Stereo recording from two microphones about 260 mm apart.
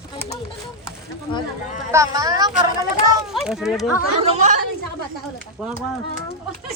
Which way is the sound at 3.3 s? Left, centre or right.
Centre.